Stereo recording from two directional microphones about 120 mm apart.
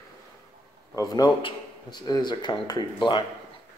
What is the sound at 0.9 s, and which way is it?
Speech, 35° left (ahead or behind).